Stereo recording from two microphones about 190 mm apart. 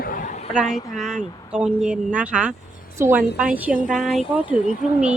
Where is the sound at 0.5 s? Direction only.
5° right (ahead or behind).